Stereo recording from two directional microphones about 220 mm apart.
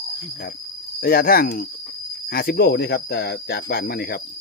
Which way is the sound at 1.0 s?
45° left (ahead or behind).